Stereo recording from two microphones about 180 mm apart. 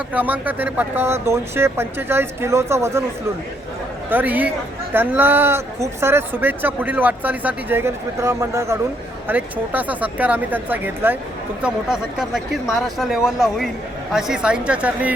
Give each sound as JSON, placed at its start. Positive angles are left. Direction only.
{"t": 0.1, "sound": "speech", "side_deg": -10}
{"t": 4.1, "sound": "speech", "side_deg": -10}